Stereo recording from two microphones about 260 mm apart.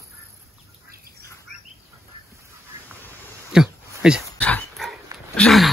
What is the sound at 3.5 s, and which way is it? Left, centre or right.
Dog, centre.